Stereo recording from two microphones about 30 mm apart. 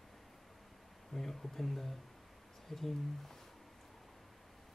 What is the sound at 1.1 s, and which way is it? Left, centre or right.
Speech, centre.